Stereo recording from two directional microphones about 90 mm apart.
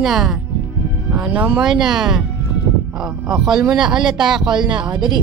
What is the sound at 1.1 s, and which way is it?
A woman's voice, 15° right (ahead or behind).